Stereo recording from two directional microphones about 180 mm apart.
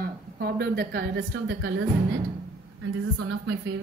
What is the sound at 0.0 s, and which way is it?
A woman's voice, 60° right (ahead or behind).